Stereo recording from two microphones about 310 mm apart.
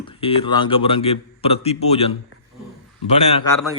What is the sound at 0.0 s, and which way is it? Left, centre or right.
A man's voice, centre.